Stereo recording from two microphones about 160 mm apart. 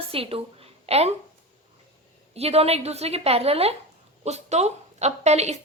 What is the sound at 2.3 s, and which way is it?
A woman's voice, 40° right (ahead or behind).